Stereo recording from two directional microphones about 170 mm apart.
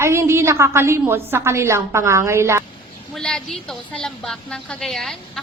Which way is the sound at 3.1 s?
5° left (ahead or behind).